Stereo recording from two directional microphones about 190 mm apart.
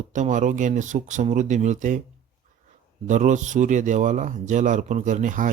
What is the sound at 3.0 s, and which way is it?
Speech, 40° right (ahead or behind).